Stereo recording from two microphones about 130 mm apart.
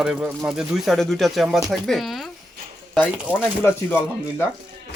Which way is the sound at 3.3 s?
10° right (ahead or behind).